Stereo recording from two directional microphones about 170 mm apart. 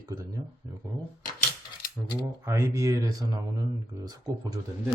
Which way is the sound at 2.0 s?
20° right (ahead or behind).